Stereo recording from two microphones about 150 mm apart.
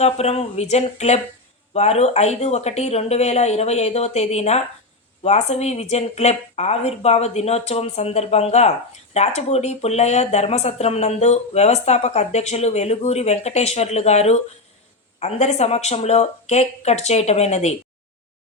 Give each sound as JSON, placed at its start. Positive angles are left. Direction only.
{"t": 0.0, "sound": "speech", "side_deg": 45}